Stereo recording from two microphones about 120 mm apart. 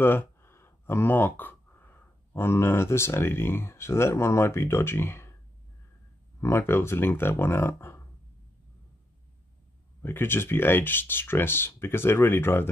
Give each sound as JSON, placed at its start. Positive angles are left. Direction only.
{"t": 0.0, "sound": "speech", "side_deg": 15}
{"t": 6.4, "sound": "speech", "side_deg": 20}
{"t": 10.0, "sound": "speech", "side_deg": 20}